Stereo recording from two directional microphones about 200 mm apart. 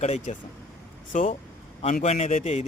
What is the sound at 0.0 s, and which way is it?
A man's voice, 35° left (ahead or behind).